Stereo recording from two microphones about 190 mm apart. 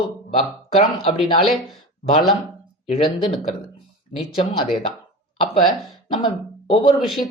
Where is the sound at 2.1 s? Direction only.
30° left (ahead or behind).